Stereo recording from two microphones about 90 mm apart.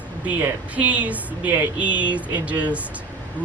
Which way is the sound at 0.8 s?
15° right (ahead or behind).